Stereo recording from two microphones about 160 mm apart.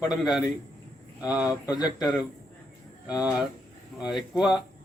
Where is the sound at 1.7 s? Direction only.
25° left (ahead or behind).